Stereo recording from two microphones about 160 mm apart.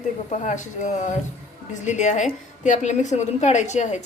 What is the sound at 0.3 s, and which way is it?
A woman's voice, 50° left (ahead or behind).